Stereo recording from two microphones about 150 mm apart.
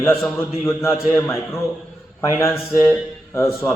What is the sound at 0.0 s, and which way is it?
Speech, 15° left (ahead or behind).